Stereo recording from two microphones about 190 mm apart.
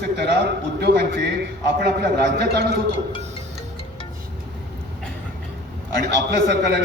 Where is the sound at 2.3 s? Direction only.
60° right (ahead or behind).